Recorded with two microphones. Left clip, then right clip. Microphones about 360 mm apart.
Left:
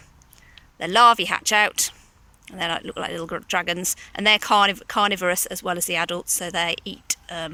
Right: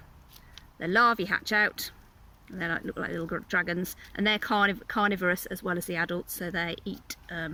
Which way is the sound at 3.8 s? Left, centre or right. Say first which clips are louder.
Left 11 dB; left.